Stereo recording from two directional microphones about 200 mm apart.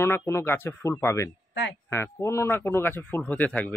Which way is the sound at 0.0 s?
15° left (ahead or behind).